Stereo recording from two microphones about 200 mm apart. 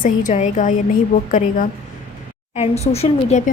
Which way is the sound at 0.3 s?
35° left (ahead or behind).